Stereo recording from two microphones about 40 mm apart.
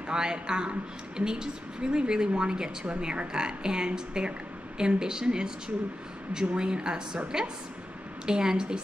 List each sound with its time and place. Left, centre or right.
0.1 s a woman's voice: centre
6.5 s a woman's voice: right
8.3 s a woman's voice: centre